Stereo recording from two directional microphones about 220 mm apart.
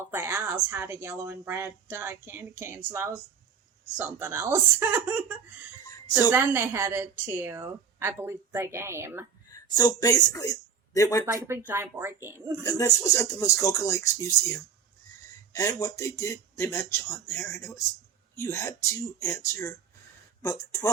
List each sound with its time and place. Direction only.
0.1 s a woman's voice: 10° right (ahead or behind)
9.5 s speech: 15° left (ahead or behind)
11.3 s a woman's voice: 10° right (ahead or behind)
12.6 s speech: 15° left (ahead or behind)
15.5 s speech: 15° left (ahead or behind)